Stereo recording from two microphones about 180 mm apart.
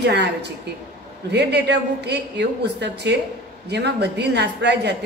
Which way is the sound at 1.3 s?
70° right (ahead or behind).